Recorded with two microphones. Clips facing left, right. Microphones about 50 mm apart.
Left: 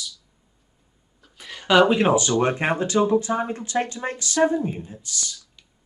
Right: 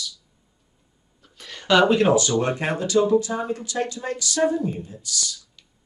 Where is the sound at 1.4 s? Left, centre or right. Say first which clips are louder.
Left 1 dB; centre.